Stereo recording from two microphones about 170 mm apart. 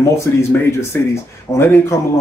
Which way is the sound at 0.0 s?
15° left (ahead or behind).